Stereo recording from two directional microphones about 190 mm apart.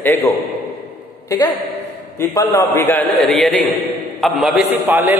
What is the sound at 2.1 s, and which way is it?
A man's voice, 15° left (ahead or behind).